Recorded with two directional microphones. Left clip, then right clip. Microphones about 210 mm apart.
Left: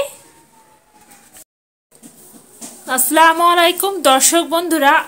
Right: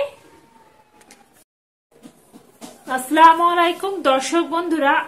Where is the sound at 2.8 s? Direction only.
55° left (ahead or behind).